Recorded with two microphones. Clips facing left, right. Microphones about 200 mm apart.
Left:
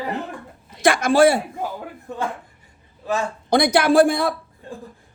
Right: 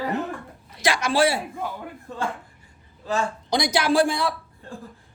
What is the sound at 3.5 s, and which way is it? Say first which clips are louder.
Speech: left 6 dB; 60° left (ahead or behind).